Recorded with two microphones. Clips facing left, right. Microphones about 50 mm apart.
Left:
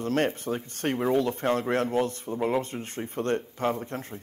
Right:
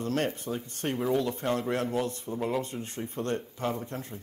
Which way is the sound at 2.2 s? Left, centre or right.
Left.